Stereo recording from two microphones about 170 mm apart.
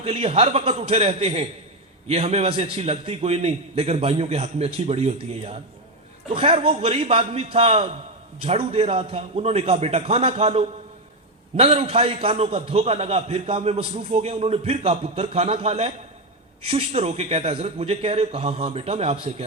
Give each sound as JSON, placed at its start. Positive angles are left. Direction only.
{"t": 0.0, "sound": "a man's voice", "side_deg": -35}